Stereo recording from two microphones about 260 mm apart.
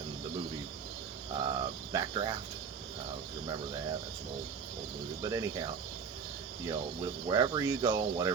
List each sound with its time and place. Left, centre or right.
1.3 s cricket: centre
5.2 s speech: centre